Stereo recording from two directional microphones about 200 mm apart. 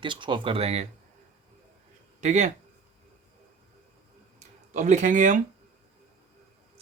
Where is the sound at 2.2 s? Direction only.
35° right (ahead or behind).